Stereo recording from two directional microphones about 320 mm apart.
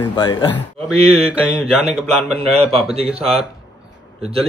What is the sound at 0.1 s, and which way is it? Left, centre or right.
Speech, centre.